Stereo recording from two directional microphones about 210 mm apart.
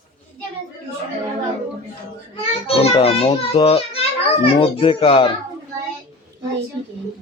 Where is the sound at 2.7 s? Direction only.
25° left (ahead or behind).